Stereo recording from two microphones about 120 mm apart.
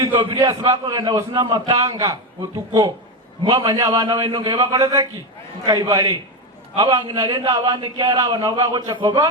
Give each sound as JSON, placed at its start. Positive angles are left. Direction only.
{"t": 0.1, "sound": "a man's voice", "side_deg": -40}